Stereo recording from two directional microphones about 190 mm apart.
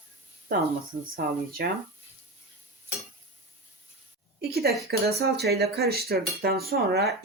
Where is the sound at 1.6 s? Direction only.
55° right (ahead or behind).